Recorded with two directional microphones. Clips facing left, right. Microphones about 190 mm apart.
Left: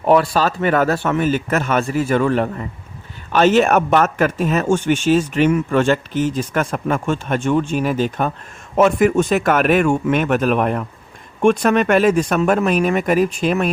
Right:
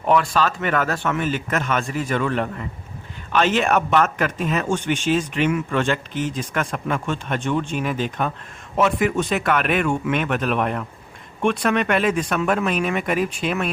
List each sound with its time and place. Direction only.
0.0 s speech: 35° left (ahead or behind)